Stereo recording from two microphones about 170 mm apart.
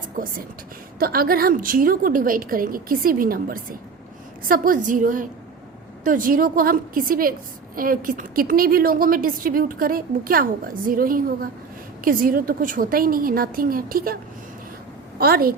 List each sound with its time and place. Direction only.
0.9 s a woman's voice: 60° right (ahead or behind)
15.2 s a woman's voice: 60° right (ahead or behind)